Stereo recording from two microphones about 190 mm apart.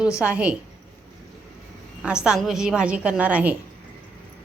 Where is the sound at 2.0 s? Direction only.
5° right (ahead or behind).